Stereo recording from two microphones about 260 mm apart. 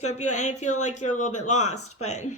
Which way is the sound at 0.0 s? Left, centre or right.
Left.